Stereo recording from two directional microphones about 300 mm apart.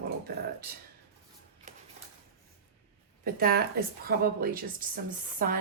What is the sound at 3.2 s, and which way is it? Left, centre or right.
A woman's voice, right.